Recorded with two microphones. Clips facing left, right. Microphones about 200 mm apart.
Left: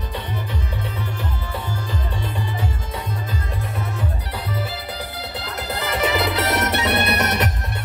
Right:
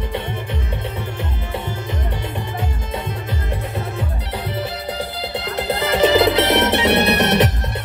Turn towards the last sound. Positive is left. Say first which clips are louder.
# right 6 dB
turn(degrees=-30)  # may be behind; listen again after turning